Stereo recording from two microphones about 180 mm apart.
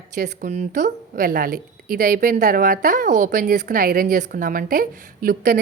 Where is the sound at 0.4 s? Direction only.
45° right (ahead or behind).